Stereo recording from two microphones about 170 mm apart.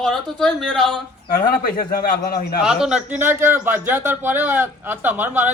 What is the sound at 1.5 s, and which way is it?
A man's voice, 65° left (ahead or behind).